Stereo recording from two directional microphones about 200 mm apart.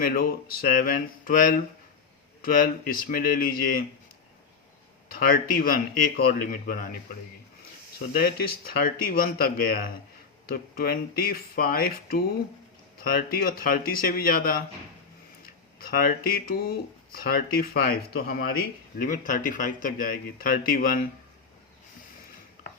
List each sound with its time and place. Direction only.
0.0 s speech: 45° left (ahead or behind)
5.0 s speech: 45° left (ahead or behind)
8.1 s speech: 50° left (ahead or behind)